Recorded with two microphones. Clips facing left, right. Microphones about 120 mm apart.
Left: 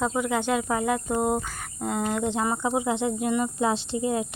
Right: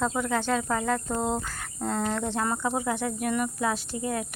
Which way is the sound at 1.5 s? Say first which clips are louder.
Left 1 dB; 10° left (ahead or behind).